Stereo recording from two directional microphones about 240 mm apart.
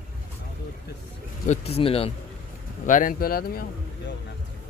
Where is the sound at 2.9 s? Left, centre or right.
Left.